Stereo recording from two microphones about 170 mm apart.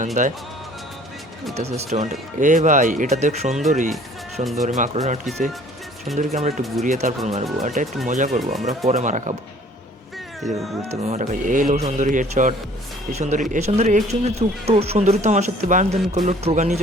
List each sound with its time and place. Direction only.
0.0 s speech: 45° right (ahead or behind)
1.5 s speech: 40° right (ahead or behind)
10.4 s speech: centre (ahead or behind)
10.8 s speech: 40° right (ahead or behind)